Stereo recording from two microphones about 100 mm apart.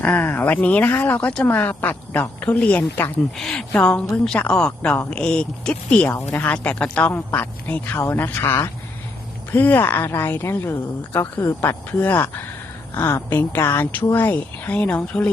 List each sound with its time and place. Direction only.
0.0 s a woman's voice: 20° left (ahead or behind)